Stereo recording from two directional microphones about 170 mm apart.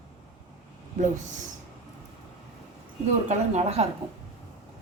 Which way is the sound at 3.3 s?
40° right (ahead or behind).